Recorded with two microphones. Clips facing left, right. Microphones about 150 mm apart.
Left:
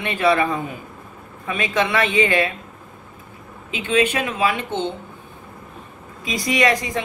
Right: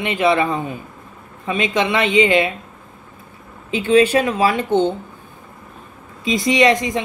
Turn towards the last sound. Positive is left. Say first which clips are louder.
# right 4 dB
turn(degrees=-20)  # may be behind; listen again after turning